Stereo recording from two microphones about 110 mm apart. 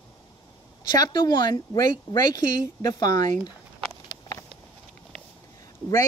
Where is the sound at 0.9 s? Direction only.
40° left (ahead or behind).